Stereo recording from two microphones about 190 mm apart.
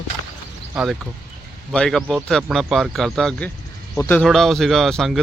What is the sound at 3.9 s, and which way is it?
Speech, 15° left (ahead or behind).